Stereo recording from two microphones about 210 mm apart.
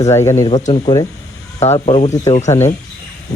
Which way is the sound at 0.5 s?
30° left (ahead or behind).